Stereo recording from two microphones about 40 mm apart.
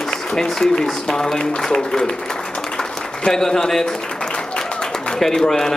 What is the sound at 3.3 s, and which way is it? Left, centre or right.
Speech, centre.